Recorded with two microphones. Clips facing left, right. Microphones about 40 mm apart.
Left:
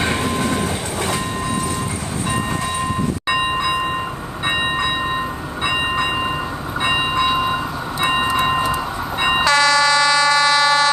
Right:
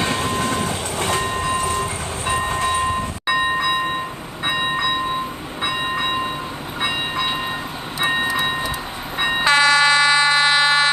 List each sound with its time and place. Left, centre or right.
0.0 s train: left
1.0 s train: right
9.4 s emergency vehicle: right